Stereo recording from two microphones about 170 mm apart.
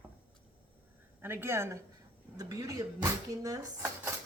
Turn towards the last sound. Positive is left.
turn(degrees=-15)  # may be behind; listen again after turning